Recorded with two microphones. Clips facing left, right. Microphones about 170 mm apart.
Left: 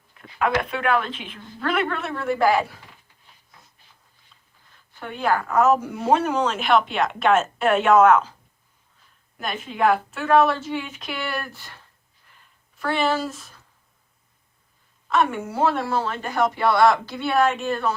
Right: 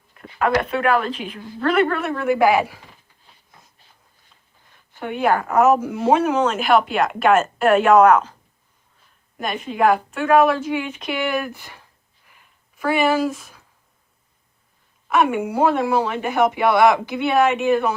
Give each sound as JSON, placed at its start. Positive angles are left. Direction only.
{"t": 0.1, "sound": "a sound", "side_deg": 0}
{"t": 0.6, "sound": "speech", "side_deg": 0}
{"t": 5.2, "sound": "speech", "side_deg": -20}
{"t": 5.6, "sound": "speech", "side_deg": -5}
{"t": 9.4, "sound": "speech", "side_deg": 0}
{"t": 11.2, "sound": "speech", "side_deg": -15}
{"t": 12.8, "sound": "speech", "side_deg": -10}
{"t": 13.3, "sound": "speech", "side_deg": 0}
{"t": 15.0, "sound": "speech", "side_deg": -10}
{"t": 17.2, "sound": "speech", "side_deg": -5}
{"t": 17.6, "sound": "speech", "side_deg": -15}